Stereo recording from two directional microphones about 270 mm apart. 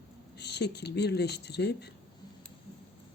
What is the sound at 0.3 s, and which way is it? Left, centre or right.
Speech, left.